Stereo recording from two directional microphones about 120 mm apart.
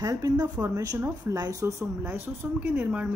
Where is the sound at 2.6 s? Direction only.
10° right (ahead or behind).